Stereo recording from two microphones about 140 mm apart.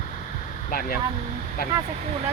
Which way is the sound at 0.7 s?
90° left.